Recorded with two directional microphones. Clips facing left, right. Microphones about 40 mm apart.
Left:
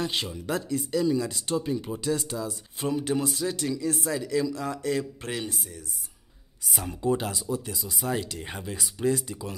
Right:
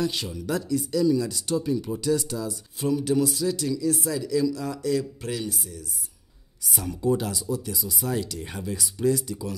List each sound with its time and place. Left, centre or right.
0.0 s speech: left